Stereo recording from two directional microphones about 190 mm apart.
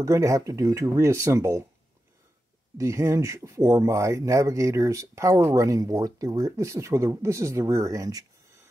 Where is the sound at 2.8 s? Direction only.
15° right (ahead or behind).